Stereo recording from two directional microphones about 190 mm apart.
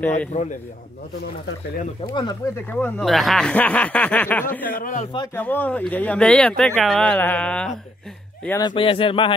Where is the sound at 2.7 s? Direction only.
5° left (ahead or behind).